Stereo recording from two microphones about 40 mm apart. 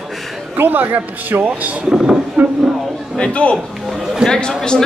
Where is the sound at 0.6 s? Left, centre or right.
Right.